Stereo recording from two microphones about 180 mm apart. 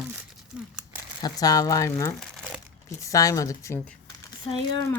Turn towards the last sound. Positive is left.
turn(degrees=25)  # may be behind; listen again after turning